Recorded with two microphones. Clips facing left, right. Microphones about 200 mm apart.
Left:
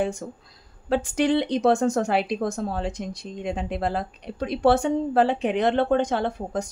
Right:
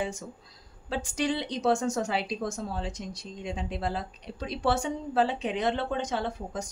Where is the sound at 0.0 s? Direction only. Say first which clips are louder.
Left 7 dB; 60° left (ahead or behind).